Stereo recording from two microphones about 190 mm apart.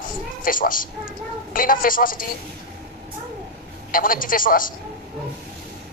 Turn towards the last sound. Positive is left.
turn(degrees=45)  # may be behind; listen again after turning